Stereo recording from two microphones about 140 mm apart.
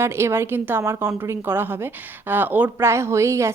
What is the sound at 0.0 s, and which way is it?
A woman's voice, 20° right (ahead or behind).